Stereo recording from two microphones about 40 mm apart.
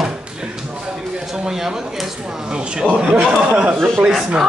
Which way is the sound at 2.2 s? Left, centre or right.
Right.